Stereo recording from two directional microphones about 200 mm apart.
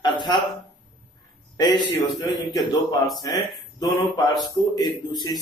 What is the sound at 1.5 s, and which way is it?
Speech, 20° left (ahead or behind).